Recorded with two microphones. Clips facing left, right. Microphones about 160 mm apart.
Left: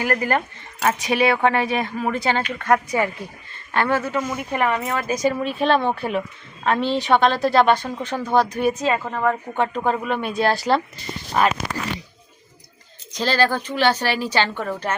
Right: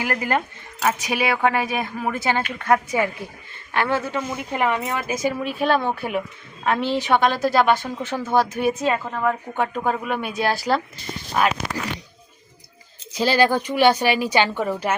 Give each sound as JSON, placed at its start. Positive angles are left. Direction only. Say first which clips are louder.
{"t": 0.0, "sound": "a woman's voice", "louder": "left 2 dB", "side_deg": -15}
{"t": 13.1, "sound": "speech", "louder": "right 2 dB", "side_deg": -10}